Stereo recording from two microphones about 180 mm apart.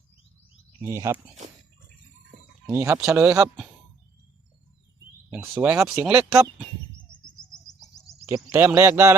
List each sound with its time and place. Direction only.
0.8 s speech: 15° right (ahead or behind)
2.6 s speech: 15° right (ahead or behind)
5.3 s speech: 10° right (ahead or behind)
7.5 s bird: 5° left (ahead or behind)
8.2 s speech: 15° right (ahead or behind)